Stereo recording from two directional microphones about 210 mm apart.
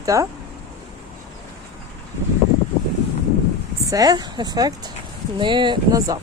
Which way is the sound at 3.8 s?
15° right (ahead or behind).